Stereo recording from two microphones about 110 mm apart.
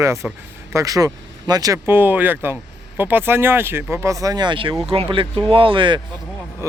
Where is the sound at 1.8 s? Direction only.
20° right (ahead or behind); by 6.0 s 50° right (ahead or behind).